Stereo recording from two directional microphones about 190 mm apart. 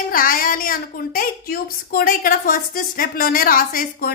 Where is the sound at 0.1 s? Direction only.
50° left (ahead or behind).